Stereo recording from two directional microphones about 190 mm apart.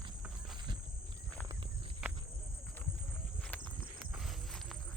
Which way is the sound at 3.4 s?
10° left (ahead or behind).